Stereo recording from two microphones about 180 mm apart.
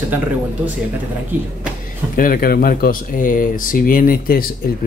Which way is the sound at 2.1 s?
50° left (ahead or behind).